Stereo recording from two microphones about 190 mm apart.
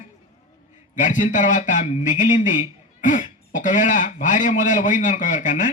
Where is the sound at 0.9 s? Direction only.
40° left (ahead or behind).